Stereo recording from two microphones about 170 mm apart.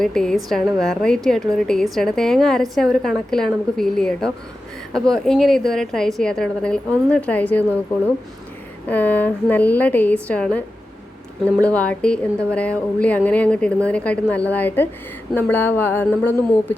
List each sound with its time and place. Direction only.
0.0 s a woman's voice: 5° left (ahead or behind)
8.9 s speech: 10° left (ahead or behind)
11.6 s speech: 5° left (ahead or behind)